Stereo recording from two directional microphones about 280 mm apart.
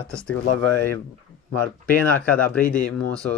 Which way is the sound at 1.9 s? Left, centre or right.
Centre.